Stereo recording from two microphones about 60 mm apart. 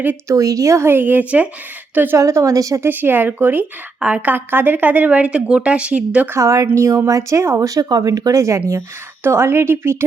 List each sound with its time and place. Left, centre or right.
0.3 s a woman's voice: right
0.9 s speech: right
1.2 s speech: right
2.1 s a woman's voice: right
2.8 s speech: right; by 6.2 s centre
6.4 s a woman's voice: right
7.6 s speech: right
9.2 s speech: right